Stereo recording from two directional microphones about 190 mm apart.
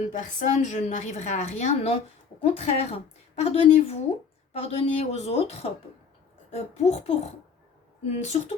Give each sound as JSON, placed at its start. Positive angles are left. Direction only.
{"t": 0.1, "sound": "a woman's voice", "side_deg": 40}